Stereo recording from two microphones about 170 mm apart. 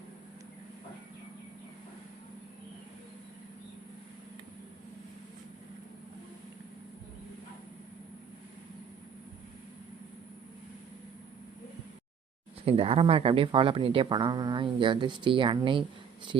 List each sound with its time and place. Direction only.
12.6 s speech: 35° right (ahead or behind)